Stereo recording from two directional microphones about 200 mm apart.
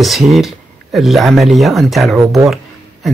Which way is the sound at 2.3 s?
Centre (ahead or behind).